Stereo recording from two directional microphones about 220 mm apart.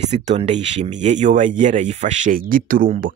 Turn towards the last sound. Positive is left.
turn(degrees=-40)  # may be behind; listen again after turning